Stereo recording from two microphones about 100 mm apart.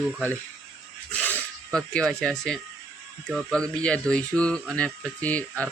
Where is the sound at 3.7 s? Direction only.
10° left (ahead or behind).